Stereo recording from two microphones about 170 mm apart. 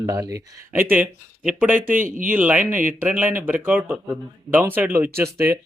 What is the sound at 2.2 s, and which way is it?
Speech, 10° right (ahead or behind).